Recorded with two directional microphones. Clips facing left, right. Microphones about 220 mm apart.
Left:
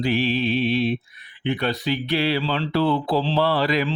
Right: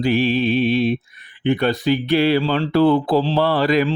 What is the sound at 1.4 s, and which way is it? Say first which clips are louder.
Speech: right 6 dB; 50° right (ahead or behind).